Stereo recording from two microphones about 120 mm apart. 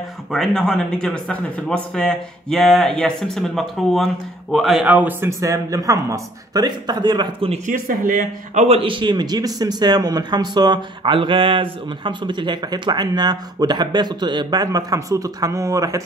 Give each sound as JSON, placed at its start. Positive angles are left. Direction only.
{"t": 0.3, "sound": "speech", "side_deg": 0}
{"t": 4.9, "sound": "a man's voice", "side_deg": -15}
{"t": 5.4, "sound": "a man's voice", "side_deg": -25}
{"t": 7.4, "sound": "a man's voice", "side_deg": -65}